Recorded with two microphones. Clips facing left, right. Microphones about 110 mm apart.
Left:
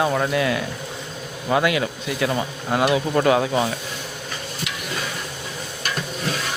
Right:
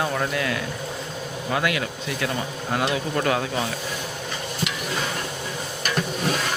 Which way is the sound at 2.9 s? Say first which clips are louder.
Left 5 dB; 20° left (ahead or behind).